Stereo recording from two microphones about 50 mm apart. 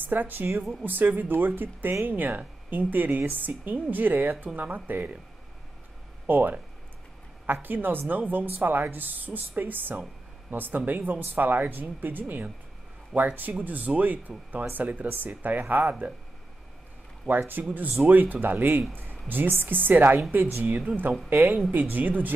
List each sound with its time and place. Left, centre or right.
0.0 s speech: right
6.2 s speech: right
7.6 s speech: right
17.3 s speech: right